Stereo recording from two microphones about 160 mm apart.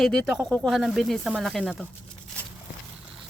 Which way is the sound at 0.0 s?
5° left (ahead or behind).